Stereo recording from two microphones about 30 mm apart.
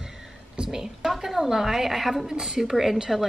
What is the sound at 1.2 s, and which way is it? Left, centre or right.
A woman's voice, centre.